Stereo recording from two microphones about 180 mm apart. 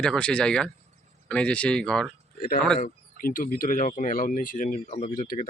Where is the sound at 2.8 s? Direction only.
50° left (ahead or behind).